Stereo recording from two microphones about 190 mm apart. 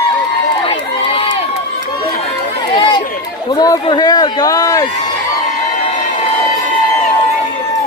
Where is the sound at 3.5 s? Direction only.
20° left (ahead or behind).